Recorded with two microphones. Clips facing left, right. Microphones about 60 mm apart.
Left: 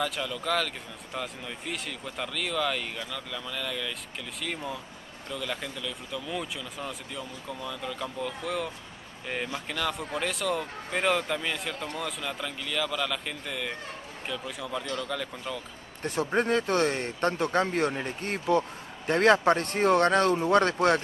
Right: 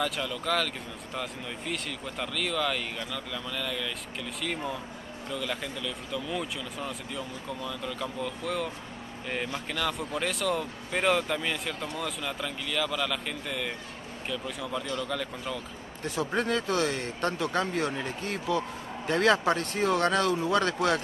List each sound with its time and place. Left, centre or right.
0.0 s speech: centre
16.3 s a man's voice: left